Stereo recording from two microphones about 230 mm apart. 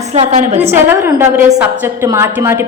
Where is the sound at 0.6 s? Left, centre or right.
Centre.